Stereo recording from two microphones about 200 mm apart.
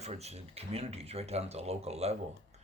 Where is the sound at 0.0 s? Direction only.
30° right (ahead or behind).